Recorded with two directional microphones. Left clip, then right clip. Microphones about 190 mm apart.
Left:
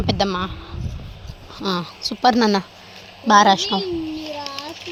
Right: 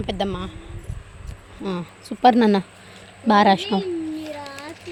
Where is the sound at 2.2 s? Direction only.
20° right (ahead or behind).